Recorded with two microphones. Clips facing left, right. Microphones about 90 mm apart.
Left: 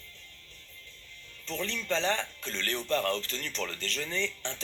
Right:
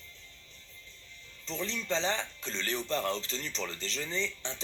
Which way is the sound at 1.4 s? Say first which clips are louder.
Left 1 dB; 20° right (ahead or behind).